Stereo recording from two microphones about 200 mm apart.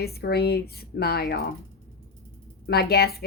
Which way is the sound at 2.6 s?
50° left (ahead or behind).